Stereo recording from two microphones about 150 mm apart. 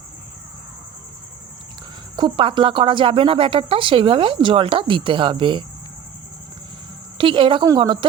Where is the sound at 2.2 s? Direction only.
35° right (ahead or behind).